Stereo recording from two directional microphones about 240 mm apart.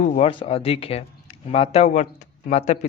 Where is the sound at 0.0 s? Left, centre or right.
Left.